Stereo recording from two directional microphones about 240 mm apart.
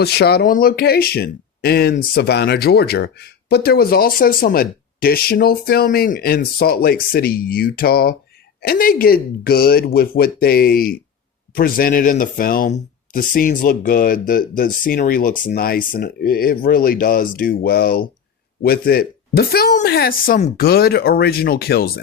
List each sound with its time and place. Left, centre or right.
0.0 s speech: left